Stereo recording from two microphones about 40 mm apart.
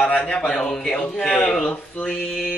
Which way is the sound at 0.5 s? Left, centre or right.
Centre.